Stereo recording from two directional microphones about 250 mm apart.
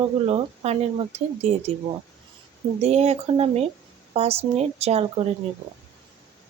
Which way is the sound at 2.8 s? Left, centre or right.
Right.